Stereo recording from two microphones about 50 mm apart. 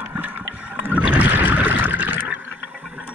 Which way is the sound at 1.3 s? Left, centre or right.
Right.